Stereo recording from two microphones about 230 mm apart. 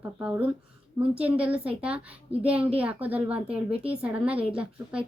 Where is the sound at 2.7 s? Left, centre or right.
Centre.